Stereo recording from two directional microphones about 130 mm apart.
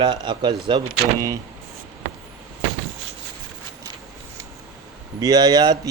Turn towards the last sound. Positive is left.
turn(degrees=-30)  # may be behind; listen again after turning